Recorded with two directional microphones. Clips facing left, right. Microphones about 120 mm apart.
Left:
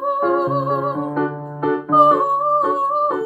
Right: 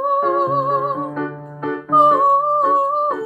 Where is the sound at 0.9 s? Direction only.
15° left (ahead or behind).